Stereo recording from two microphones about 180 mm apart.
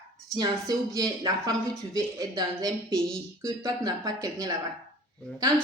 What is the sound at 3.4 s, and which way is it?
Speech, 20° right (ahead or behind).